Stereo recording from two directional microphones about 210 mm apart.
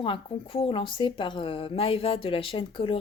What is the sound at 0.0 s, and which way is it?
Speech, 25° left (ahead or behind).